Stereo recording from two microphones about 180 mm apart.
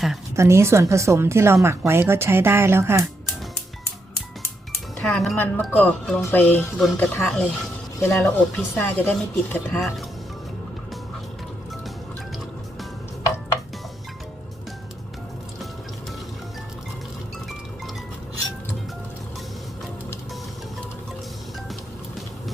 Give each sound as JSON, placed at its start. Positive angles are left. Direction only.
{"t": 0.3, "sound": "a woman's voice", "side_deg": -15}
{"t": 4.9, "sound": "speech", "side_deg": 5}
{"t": 6.7, "sound": "speech", "side_deg": 0}